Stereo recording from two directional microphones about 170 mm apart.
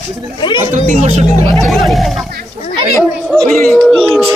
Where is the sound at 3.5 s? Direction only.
5° left (ahead or behind).